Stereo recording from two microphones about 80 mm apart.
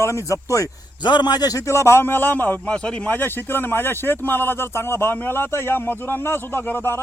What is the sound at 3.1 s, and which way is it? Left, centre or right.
Speech, left.